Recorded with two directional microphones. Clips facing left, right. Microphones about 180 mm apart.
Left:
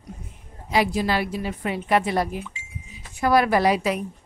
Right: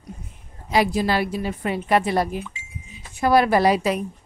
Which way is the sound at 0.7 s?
40° right (ahead or behind).